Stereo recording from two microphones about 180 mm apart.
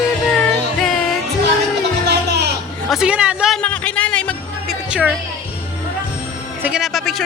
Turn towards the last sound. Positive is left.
turn(degrees=0)  # may be behind; listen again after turning